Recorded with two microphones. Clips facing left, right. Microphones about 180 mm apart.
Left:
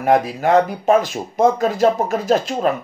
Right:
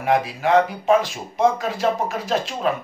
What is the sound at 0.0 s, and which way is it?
Speech, 45° left (ahead or behind).